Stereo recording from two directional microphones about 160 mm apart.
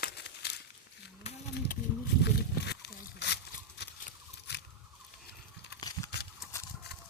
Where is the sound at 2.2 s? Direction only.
90° left.